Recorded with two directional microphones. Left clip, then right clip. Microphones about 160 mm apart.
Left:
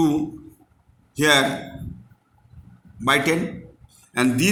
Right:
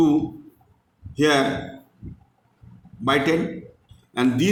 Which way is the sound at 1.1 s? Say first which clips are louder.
Left 2 dB; 50° left (ahead or behind).